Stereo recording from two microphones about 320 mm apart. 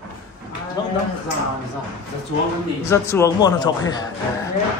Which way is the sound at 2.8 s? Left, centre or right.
Centre.